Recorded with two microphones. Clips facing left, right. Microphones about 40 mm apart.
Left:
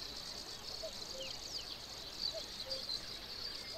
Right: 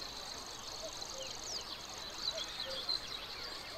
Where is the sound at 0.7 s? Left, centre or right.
Right.